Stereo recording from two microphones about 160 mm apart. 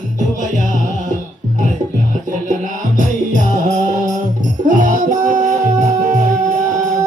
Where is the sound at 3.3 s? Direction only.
50° right (ahead or behind).